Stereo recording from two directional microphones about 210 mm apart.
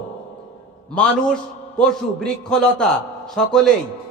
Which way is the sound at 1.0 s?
5° left (ahead or behind).